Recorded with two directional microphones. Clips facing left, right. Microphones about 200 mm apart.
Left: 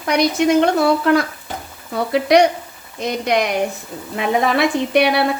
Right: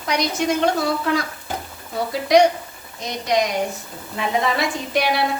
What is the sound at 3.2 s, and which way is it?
A woman's voice, 60° left (ahead or behind).